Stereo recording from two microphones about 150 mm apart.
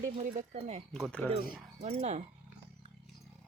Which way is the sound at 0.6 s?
45° right (ahead or behind).